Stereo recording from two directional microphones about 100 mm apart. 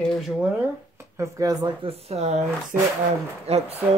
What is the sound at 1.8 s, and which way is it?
Speech, 85° right.